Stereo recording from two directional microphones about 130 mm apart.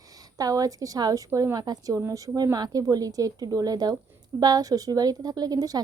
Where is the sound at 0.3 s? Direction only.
25° right (ahead or behind).